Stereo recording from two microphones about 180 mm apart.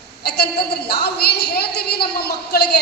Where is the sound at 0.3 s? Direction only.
65° left (ahead or behind).